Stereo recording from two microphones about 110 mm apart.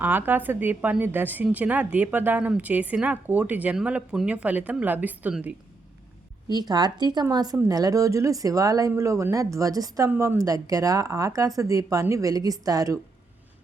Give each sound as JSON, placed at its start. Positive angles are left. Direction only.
{"t": 0.0, "sound": "a woman's voice", "side_deg": -15}
{"t": 6.5, "sound": "a woman's voice", "side_deg": -40}